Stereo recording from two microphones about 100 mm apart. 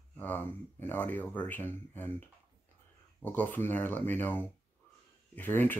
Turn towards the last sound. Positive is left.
turn(degrees=20)  # may be behind; listen again after turning